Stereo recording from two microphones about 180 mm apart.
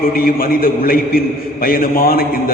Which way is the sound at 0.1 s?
55° left (ahead or behind).